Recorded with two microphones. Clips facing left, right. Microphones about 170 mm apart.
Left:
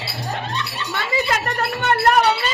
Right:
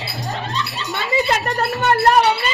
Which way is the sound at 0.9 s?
25° right (ahead or behind).